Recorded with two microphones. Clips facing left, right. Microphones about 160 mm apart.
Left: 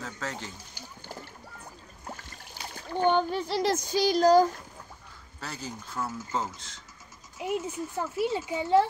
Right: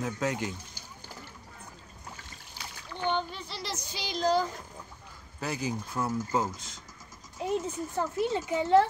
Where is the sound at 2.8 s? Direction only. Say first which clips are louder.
Left 7 dB; 45° left (ahead or behind).